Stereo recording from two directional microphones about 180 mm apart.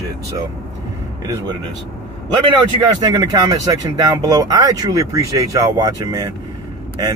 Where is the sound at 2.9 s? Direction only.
20° right (ahead or behind).